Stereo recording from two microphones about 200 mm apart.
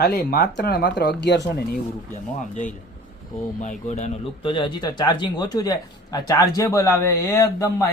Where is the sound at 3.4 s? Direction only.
40° left (ahead or behind).